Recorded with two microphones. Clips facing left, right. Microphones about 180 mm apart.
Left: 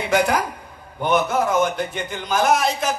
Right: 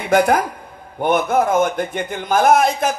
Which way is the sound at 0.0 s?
55° right (ahead or behind).